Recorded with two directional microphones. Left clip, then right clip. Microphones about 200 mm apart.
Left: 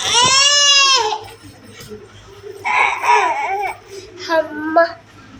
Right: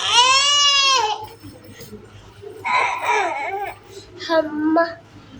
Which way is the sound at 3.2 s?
10° right (ahead or behind).